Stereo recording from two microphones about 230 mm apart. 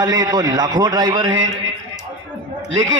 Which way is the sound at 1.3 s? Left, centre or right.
Right.